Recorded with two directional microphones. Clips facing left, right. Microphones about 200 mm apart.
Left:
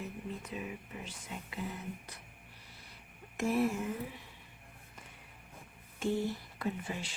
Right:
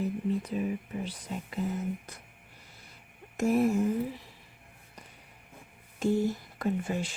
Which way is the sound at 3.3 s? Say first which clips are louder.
Right 6 dB; 45° right (ahead or behind).